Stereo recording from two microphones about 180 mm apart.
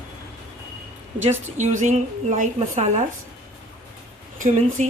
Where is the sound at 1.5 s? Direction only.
40° right (ahead or behind).